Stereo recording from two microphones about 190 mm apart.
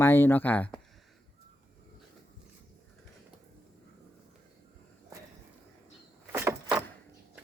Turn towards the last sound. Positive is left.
turn(degrees=-15)  # may be behind; listen again after turning